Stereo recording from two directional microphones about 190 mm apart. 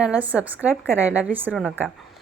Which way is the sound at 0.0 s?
5° right (ahead or behind).